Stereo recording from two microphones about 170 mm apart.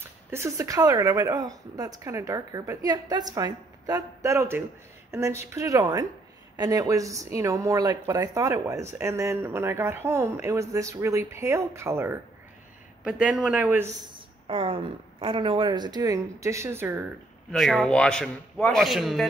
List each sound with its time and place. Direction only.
0.0 s speech: 15° right (ahead or behind)
14.5 s speech: 30° right (ahead or behind); by 17.0 s 15° right (ahead or behind)
17.5 s a man's voice: centre (ahead or behind)